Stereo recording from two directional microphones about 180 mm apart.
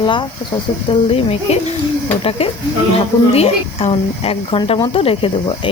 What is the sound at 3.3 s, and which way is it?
A woman's voice, 35° left (ahead or behind).